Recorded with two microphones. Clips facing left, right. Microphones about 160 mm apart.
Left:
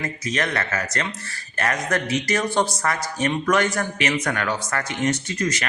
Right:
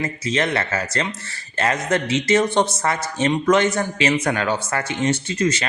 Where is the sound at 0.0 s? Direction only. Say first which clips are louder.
Right 4 dB; 25° right (ahead or behind).